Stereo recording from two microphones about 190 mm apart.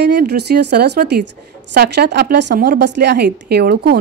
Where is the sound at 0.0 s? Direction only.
60° right (ahead or behind).